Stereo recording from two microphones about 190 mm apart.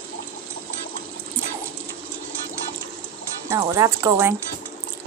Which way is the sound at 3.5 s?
15° right (ahead or behind).